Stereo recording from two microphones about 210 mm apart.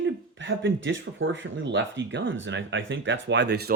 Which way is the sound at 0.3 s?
65° right (ahead or behind).